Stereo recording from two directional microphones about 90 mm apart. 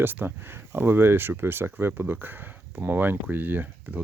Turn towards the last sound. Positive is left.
turn(degrees=-20)  # may be behind; listen again after turning